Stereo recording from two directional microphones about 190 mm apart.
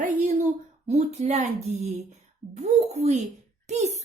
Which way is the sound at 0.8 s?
35° right (ahead or behind).